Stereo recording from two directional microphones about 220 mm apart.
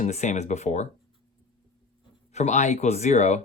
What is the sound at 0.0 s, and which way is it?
Speech, 30° left (ahead or behind).